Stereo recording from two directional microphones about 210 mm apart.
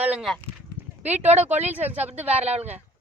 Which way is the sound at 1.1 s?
30° right (ahead or behind).